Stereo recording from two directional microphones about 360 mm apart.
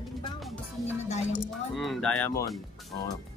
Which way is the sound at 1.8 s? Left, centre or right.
Centre.